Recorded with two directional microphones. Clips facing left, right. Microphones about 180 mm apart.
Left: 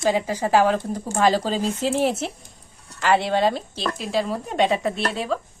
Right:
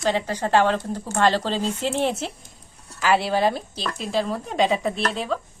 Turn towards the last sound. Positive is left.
turn(degrees=0)  # may be behind; listen again after turning